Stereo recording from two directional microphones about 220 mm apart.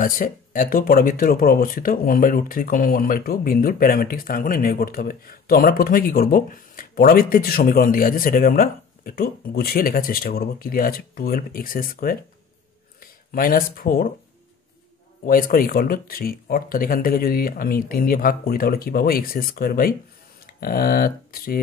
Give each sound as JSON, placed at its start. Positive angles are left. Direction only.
{"t": 0.0, "sound": "speech", "side_deg": 40}
{"t": 15.2, "sound": "speech", "side_deg": 40}